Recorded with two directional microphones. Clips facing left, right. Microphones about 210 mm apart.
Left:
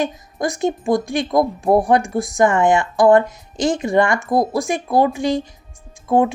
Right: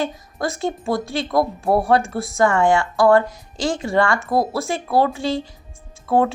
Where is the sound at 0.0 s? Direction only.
15° left (ahead or behind).